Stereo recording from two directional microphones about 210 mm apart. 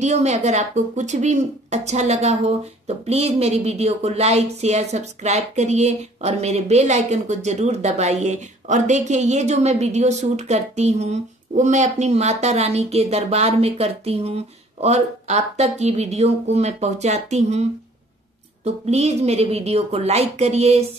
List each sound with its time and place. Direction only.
0.0 s speech: 30° right (ahead or behind)